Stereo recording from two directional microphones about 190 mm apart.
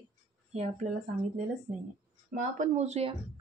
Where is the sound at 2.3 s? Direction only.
40° right (ahead or behind).